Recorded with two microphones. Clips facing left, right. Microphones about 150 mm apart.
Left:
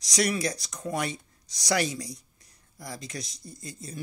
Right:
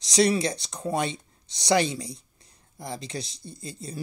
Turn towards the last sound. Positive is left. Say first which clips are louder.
# right 3 dB
turn(degrees=-30)  # may be behind; listen again after turning